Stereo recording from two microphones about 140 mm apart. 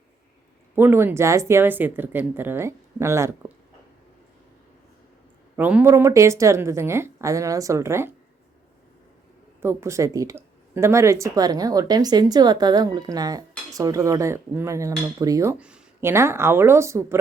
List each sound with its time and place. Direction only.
0.8 s speech: 15° right (ahead or behind)
5.5 s speech: 10° right (ahead or behind)
9.6 s speech: 20° right (ahead or behind)
15.5 s speech: 10° right (ahead or behind)